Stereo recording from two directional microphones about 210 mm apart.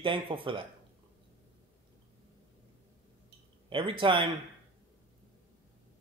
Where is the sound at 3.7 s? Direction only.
25° right (ahead or behind).